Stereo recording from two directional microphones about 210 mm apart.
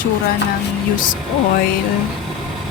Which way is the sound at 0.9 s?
40° left (ahead or behind).